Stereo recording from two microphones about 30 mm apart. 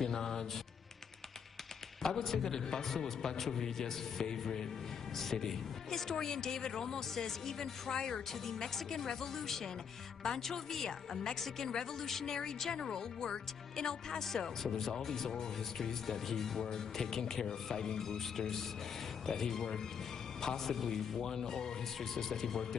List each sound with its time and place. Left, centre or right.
0.0 s mantra: centre
2.0 s a woman's voice: centre